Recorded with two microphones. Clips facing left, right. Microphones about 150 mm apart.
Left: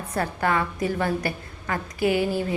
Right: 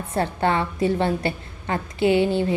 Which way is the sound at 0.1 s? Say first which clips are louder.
Right 2 dB; 25° right (ahead or behind).